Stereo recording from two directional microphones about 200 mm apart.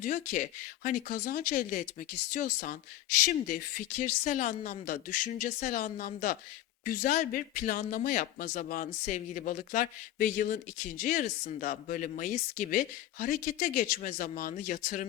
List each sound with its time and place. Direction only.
0.0 s speech: 40° left (ahead or behind)